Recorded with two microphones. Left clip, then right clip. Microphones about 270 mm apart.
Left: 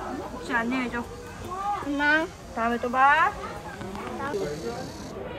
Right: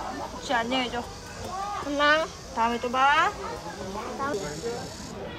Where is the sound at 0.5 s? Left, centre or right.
Centre.